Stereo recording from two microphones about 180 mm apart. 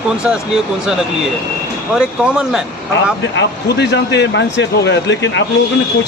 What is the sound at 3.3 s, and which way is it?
Speech, 70° left (ahead or behind).